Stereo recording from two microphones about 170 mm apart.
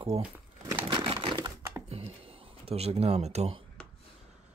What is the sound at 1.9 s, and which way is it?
Speech, 35° right (ahead or behind).